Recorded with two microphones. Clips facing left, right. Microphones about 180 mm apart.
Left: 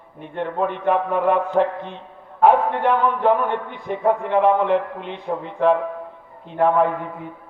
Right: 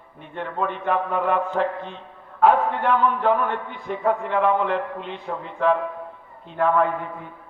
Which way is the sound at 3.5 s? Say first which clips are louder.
Left 3 dB; 55° left (ahead or behind).